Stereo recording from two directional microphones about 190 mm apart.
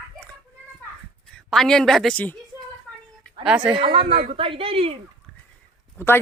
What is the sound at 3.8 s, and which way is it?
A man's voice, 30° right (ahead or behind).